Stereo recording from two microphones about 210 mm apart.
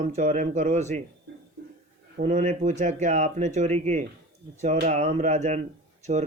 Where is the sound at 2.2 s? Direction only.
35° right (ahead or behind).